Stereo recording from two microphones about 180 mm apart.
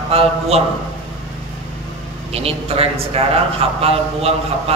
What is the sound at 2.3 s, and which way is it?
A man's voice, 35° right (ahead or behind).